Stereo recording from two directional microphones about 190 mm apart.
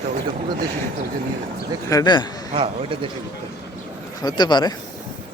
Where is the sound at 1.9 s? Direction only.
20° left (ahead or behind).